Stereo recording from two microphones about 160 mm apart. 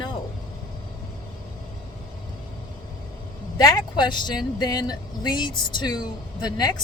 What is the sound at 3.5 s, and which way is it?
Speech, 25° left (ahead or behind).